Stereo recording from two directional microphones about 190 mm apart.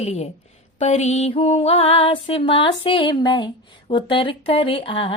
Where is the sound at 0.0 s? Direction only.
35° left (ahead or behind).